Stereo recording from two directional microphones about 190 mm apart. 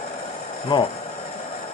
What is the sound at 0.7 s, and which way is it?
Speech, 25° left (ahead or behind).